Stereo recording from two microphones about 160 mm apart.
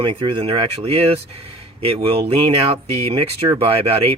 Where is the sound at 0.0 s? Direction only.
35° right (ahead or behind).